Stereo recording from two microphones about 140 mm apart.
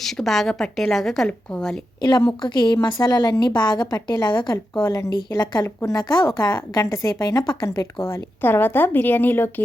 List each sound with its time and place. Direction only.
0.0 s a woman's voice: centre (ahead or behind)
2.0 s a woman's voice: 30° left (ahead or behind); by 9.6 s 15° left (ahead or behind)